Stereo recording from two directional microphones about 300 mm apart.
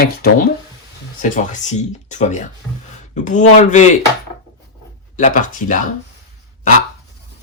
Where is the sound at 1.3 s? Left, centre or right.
Left.